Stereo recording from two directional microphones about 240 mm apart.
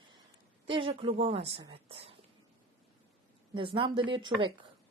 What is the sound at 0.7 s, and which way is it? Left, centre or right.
Speech, right.